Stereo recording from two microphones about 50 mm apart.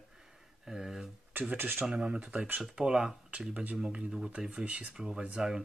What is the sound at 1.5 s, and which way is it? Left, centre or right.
Speech, right.